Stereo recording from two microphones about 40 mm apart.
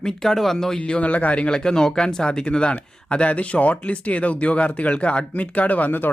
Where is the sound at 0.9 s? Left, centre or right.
Left.